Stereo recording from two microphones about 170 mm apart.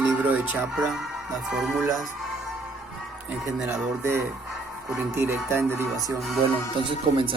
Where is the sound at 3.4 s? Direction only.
Centre (ahead or behind).